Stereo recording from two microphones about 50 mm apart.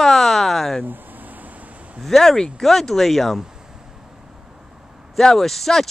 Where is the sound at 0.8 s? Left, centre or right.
Right.